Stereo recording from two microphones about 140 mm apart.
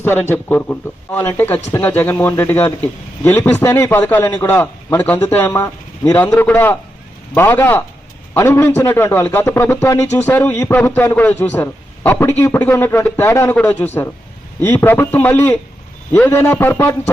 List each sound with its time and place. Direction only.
0.0 s speech: 15° left (ahead or behind)